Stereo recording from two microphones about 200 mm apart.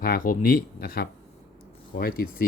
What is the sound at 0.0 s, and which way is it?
Speech, 45° left (ahead or behind).